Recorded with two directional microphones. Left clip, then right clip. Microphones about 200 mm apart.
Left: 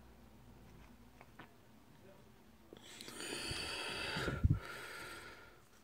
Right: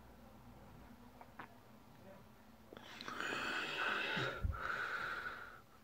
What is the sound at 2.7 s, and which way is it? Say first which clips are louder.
Wheeze: right 5 dB; 35° left (ahead or behind).